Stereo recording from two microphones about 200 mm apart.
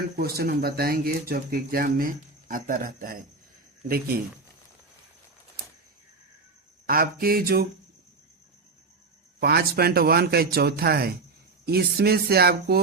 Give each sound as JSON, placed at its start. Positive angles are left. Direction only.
{"t": 0.2, "sound": "speech", "side_deg": -50}
{"t": 6.8, "sound": "speech", "side_deg": -50}
{"t": 9.4, "sound": "speech", "side_deg": -50}